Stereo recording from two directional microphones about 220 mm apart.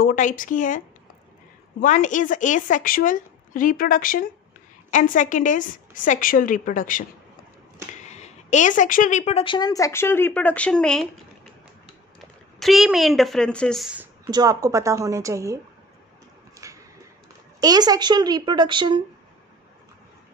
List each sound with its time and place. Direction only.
0.0 s a woman's voice: 35° left (ahead or behind); by 11.1 s 5° left (ahead or behind)
12.2 s speech: centre (ahead or behind)
14.2 s a woman's voice: 15° right (ahead or behind)
16.6 s a sound: 15° right (ahead or behind)
17.6 s a woman's voice: 15° right (ahead or behind)